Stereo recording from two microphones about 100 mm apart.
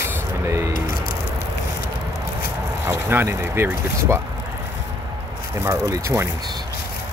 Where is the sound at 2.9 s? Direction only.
25° right (ahead or behind).